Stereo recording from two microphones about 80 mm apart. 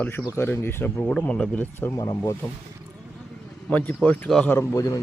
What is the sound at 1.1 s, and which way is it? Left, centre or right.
Speech, centre.